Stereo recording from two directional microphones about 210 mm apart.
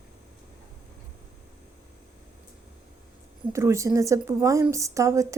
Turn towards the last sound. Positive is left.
turn(degrees=-15)  # may be behind; listen again after turning